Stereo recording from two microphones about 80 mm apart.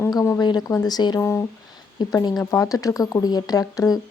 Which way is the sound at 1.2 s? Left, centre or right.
Left.